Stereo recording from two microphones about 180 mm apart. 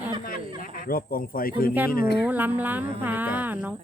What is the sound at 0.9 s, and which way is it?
Speech, 55° left (ahead or behind).